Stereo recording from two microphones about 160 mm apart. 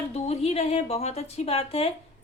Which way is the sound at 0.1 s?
40° left (ahead or behind).